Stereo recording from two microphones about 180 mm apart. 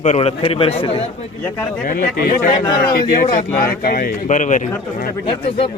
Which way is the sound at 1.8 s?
50° left (ahead or behind).